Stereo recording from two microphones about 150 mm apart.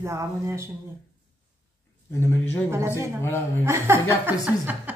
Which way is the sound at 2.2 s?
15° left (ahead or behind).